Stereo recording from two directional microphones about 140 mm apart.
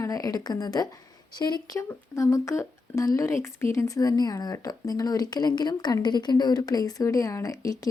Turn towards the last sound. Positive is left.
turn(degrees=25)  # may be behind; listen again after turning